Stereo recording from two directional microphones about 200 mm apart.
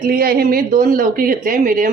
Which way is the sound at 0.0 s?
45° right (ahead or behind).